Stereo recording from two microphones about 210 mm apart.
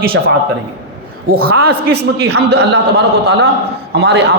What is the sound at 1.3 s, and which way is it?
A man's voice, 45° right (ahead or behind).